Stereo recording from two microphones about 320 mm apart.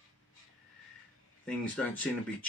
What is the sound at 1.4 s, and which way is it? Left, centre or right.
Speech, centre.